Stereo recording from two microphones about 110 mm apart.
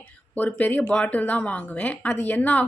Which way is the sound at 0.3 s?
15° left (ahead or behind).